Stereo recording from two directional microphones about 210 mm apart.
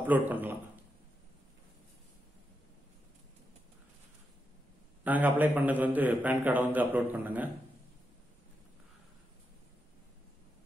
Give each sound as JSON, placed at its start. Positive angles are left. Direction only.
{"t": 0.0, "sound": "a man's voice", "side_deg": -10}
{"t": 5.0, "sound": "a man's voice", "side_deg": -10}